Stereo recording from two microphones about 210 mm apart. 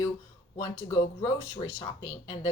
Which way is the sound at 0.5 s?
15° left (ahead or behind).